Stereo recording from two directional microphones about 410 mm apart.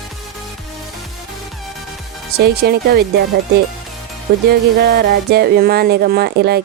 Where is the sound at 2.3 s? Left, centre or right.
Right.